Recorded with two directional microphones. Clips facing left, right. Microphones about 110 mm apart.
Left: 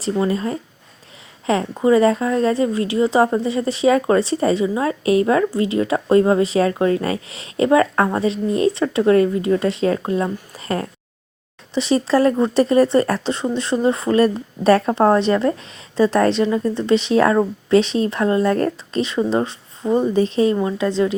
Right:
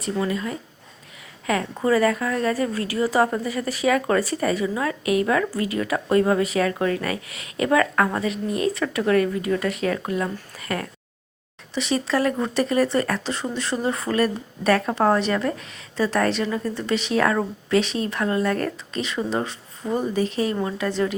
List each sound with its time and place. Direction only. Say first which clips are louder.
0.0 s a woman's voice: left 5 dB; 30° left (ahead or behind)